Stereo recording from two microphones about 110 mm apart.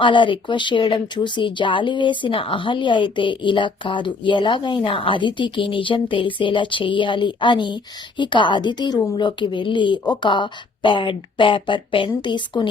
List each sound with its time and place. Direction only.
0.0 s speech: 50° left (ahead or behind)